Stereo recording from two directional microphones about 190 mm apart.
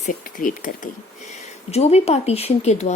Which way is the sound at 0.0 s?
45° left (ahead or behind).